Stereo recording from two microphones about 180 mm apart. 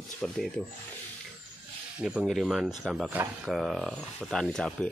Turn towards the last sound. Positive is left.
turn(degrees=5)  # may be behind; listen again after turning